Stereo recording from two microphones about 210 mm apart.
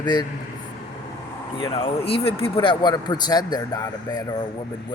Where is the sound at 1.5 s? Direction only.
20° left (ahead or behind).